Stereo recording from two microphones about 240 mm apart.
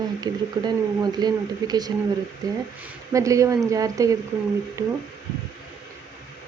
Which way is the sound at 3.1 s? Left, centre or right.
Centre.